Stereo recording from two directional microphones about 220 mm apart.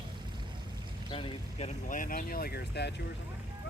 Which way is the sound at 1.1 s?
25° left (ahead or behind).